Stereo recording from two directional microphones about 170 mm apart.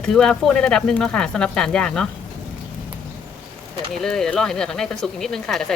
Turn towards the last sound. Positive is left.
turn(degrees=5)  # may be behind; listen again after turning